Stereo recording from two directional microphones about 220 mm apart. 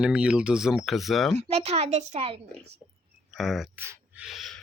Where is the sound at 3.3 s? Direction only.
Centre (ahead or behind).